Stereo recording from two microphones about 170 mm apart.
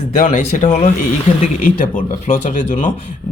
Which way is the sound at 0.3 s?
45° left (ahead or behind).